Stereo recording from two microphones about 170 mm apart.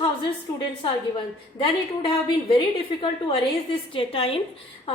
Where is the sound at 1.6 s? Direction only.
30° left (ahead or behind).